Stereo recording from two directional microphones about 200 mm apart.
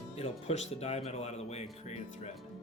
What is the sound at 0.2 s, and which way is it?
Speech, 30° left (ahead or behind).